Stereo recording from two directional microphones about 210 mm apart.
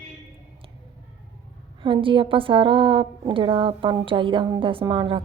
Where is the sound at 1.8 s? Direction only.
25° right (ahead or behind).